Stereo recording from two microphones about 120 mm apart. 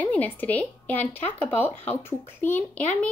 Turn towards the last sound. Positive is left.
turn(degrees=15)  # may be behind; listen again after turning